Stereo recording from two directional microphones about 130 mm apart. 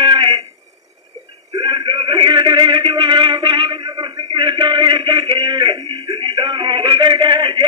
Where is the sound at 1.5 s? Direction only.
35° right (ahead or behind).